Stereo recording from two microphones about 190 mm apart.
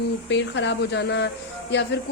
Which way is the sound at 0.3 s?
70° left (ahead or behind).